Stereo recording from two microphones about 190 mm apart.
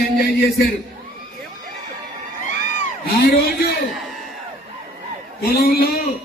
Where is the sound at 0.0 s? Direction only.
55° left (ahead or behind).